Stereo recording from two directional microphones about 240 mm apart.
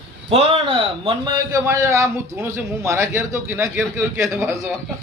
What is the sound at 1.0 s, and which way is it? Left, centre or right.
A man's voice, centre.